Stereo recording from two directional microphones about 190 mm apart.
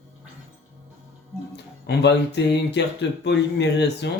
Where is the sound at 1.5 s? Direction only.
60° left (ahead or behind).